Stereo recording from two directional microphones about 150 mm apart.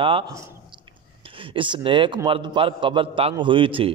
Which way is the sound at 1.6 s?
35° right (ahead or behind).